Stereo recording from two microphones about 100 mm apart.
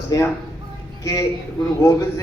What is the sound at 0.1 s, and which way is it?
A man's voice, 35° left (ahead or behind).